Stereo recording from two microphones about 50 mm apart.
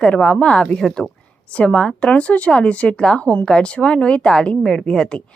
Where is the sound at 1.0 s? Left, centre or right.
Centre.